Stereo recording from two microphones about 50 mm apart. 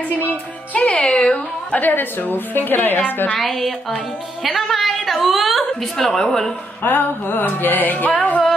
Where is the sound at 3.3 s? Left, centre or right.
Centre.